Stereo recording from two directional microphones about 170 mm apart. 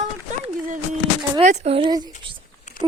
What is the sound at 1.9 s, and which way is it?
Speech, 25° right (ahead or behind).